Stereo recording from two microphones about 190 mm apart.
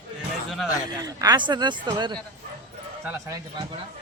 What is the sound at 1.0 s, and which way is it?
Speech, 20° right (ahead or behind).